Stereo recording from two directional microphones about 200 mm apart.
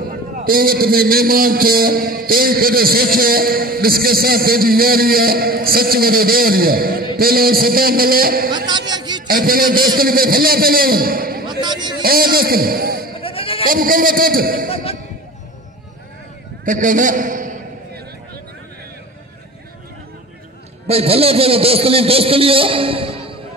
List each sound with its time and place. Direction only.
0.4 s a man's voice: 45° right (ahead or behind)
8.5 s a man's voice: 20° right (ahead or behind)
9.3 s a man's voice: 45° right (ahead or behind)
11.4 s a sound: 20° right (ahead or behind)
12.0 s a man's voice: 50° right (ahead or behind)
13.2 s bleat: 25° left (ahead or behind)
13.7 s a man's voice: 45° right (ahead or behind)
16.6 s a sound: 40° right (ahead or behind)
20.8 s a man's voice: 30° right (ahead or behind)